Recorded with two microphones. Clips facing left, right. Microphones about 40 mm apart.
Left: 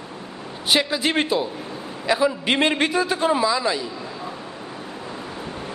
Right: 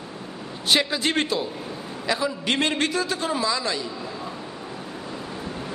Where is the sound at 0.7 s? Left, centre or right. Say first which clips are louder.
Left 1 dB; centre.